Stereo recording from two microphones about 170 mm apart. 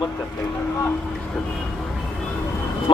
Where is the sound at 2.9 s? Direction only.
30° left (ahead or behind).